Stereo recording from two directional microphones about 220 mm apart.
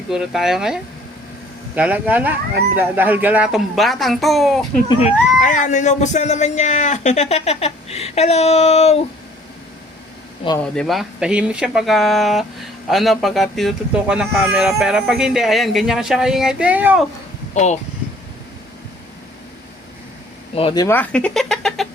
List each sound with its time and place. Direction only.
0.1 s speech: centre (ahead or behind)
4.9 s speech: 30° left (ahead or behind)
10.6 s speech: centre (ahead or behind)
17.5 s speech: 30° left (ahead or behind)
20.6 s speech: 20° left (ahead or behind)
20.8 s speech: 10° left (ahead or behind)